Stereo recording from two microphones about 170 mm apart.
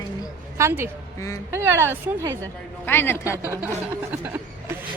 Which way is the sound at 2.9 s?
15° left (ahead or behind).